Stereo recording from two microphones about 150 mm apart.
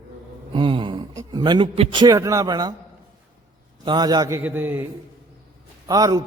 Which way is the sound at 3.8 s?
30° right (ahead or behind).